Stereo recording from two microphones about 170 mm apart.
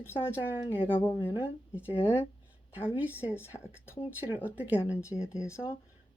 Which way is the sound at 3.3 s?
15° left (ahead or behind).